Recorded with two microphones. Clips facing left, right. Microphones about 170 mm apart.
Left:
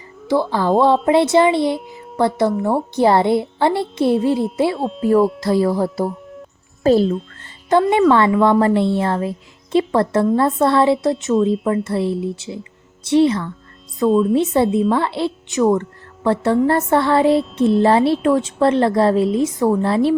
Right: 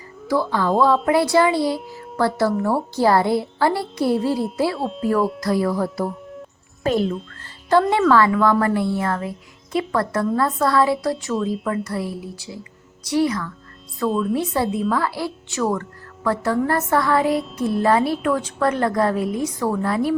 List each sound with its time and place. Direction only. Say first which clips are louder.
0.6 s speech: left 3 dB; 30° left (ahead or behind)
4.8 s speech: left 3 dB; centre (ahead or behind)
5.4 s a child's voice: left 4 dB; 25° left (ahead or behind)
7.7 s speech: left 3 dB; 20° left (ahead or behind)